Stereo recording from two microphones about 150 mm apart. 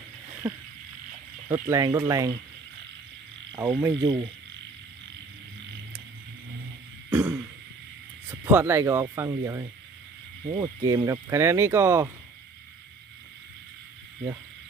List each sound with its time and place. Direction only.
0.4 s frog: 10° right (ahead or behind)
1.5 s speech: 20° right (ahead or behind)
3.5 s speech: 25° right (ahead or behind)
7.1 s throat clearing: 10° right (ahead or behind)
8.4 s speech: 15° right (ahead or behind)